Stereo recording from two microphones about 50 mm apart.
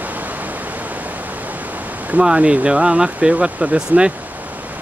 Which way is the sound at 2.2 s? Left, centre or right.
Centre.